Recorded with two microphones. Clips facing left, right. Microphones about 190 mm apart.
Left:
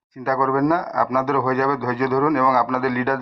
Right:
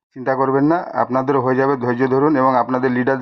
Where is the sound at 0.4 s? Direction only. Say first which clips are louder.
Right 5 dB; 5° left (ahead or behind).